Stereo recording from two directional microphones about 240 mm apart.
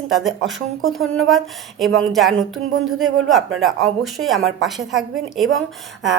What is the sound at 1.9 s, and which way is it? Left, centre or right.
Speech, right.